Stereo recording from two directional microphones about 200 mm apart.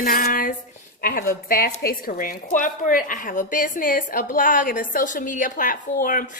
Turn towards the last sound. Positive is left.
turn(degrees=40)  # may be behind; listen again after turning